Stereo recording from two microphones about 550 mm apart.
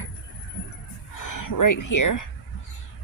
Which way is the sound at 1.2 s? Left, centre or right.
Left.